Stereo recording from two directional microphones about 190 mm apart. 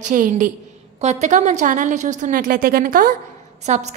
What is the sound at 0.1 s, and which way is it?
A woman's voice, 45° right (ahead or behind).